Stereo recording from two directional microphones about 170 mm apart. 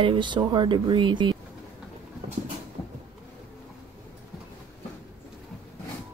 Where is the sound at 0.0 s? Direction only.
30° right (ahead or behind).